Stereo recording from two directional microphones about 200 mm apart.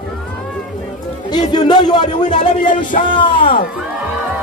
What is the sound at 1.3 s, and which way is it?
Speech, 20° left (ahead or behind).